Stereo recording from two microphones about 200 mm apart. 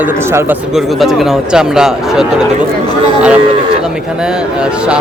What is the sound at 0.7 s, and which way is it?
Speech, centre (ahead or behind).